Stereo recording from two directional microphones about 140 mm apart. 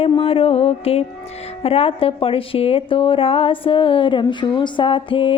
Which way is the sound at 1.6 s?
45° left (ahead or behind).